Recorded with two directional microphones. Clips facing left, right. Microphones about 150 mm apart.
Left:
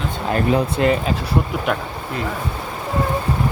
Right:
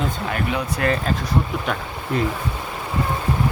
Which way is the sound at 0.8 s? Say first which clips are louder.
Left 3 dB; 25° left (ahead or behind).